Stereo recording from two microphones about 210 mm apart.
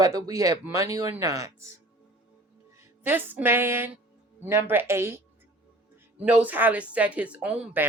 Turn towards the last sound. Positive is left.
turn(degrees=-5)  # may be behind; listen again after turning